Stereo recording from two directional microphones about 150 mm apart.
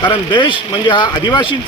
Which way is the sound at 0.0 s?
30° left (ahead or behind).